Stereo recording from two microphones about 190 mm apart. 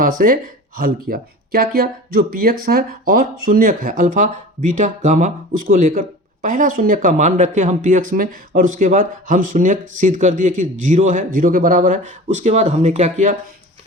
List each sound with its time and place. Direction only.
0.0 s speech: 50° right (ahead or behind)